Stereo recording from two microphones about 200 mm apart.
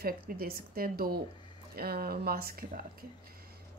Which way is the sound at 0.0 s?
50° right (ahead or behind).